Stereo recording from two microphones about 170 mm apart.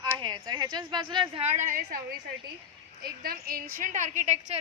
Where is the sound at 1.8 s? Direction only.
70° right (ahead or behind).